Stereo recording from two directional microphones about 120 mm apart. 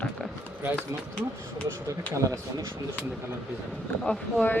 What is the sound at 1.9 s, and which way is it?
Speech, 25° right (ahead or behind).